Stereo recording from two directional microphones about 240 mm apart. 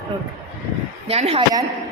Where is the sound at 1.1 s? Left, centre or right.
Right.